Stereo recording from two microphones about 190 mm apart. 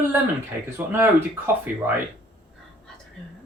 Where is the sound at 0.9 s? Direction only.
10° right (ahead or behind).